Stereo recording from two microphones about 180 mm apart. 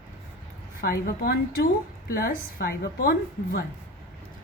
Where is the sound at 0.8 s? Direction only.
55° left (ahead or behind).